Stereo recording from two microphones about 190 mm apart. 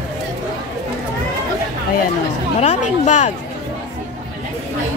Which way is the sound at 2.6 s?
35° left (ahead or behind).